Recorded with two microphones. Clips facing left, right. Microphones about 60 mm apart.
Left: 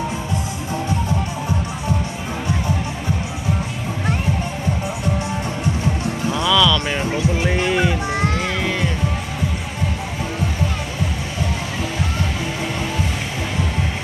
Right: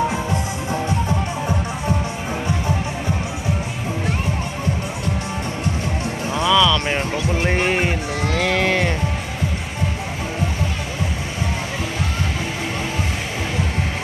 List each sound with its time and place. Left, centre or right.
6.5 s music: right
7.5 s music: right
8.4 s livestock: right